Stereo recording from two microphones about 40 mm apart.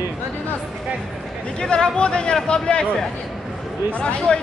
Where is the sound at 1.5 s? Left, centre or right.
Left.